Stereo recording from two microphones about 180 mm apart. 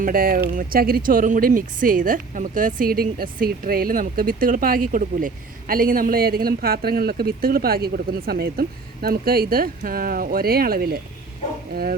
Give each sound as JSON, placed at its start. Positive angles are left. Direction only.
{"t": 0.0, "sound": "speech", "side_deg": -50}